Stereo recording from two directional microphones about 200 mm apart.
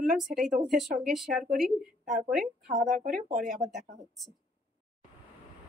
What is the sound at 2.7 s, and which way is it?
Speech, 40° right (ahead or behind).